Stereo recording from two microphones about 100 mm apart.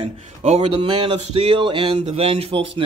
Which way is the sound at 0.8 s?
65° right (ahead or behind).